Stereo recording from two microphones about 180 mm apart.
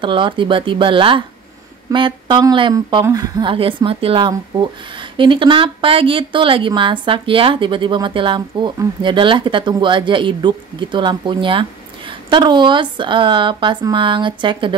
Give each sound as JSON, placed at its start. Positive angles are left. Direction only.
{"t": 0.0, "sound": "speech", "side_deg": -30}